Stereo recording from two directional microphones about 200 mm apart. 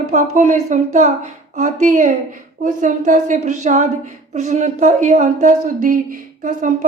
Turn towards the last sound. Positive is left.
turn(degrees=-40)  # may be behind; listen again after turning